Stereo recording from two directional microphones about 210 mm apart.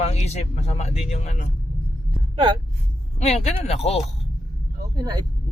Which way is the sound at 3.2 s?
30° left (ahead or behind).